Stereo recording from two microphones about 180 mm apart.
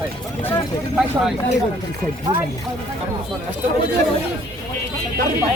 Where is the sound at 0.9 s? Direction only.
Centre (ahead or behind).